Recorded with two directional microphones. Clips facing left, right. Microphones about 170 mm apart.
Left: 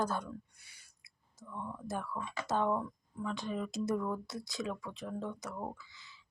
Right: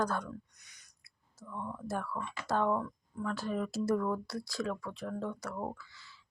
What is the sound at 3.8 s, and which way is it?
Speech, 20° left (ahead or behind).